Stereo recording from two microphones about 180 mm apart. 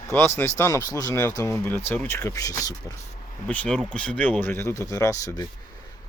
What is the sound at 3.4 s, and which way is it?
Speech, 5° left (ahead or behind).